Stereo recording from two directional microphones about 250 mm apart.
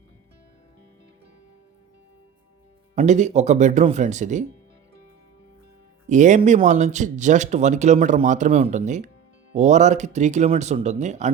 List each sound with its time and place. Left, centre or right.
2.9 s speech: right
6.1 s speech: right